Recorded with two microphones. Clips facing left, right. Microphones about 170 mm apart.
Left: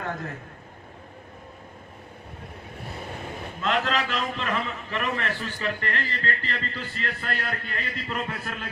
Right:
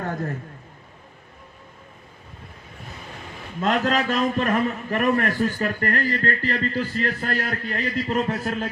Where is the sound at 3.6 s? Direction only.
45° right (ahead or behind).